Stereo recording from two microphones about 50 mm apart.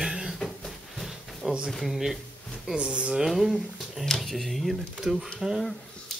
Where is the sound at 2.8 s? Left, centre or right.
Right.